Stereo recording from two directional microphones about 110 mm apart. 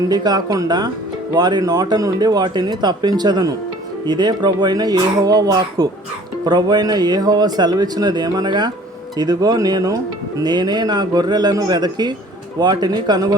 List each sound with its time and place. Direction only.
0.1 s speech: 40° right (ahead or behind)